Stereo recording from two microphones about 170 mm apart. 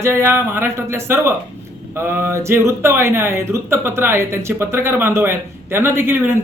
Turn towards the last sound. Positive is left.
turn(degrees=-15)  # may be behind; listen again after turning